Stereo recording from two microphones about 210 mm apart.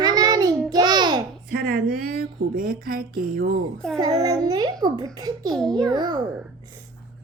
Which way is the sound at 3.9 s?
15° right (ahead or behind).